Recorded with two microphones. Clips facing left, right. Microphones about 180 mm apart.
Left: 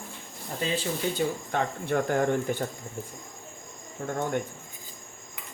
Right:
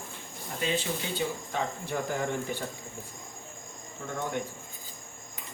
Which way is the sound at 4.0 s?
55° left (ahead or behind).